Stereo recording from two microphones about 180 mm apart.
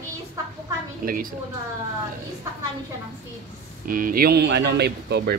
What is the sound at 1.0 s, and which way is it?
Speech, 50° right (ahead or behind).